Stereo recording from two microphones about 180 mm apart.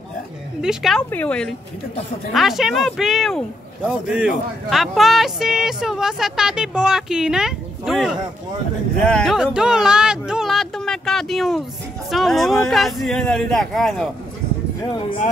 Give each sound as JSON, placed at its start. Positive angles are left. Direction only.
{"t": 0.6, "sound": "speech", "side_deg": 0}
{"t": 14.8, "sound": "speech", "side_deg": 25}